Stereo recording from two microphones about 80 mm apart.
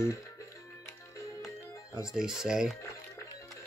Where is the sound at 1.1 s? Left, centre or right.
Left.